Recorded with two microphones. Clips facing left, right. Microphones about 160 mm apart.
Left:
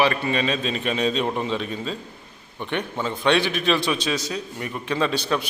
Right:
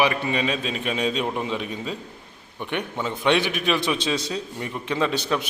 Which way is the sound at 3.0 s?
15° right (ahead or behind).